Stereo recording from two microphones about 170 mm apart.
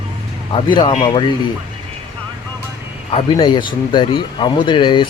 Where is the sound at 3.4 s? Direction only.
30° left (ahead or behind).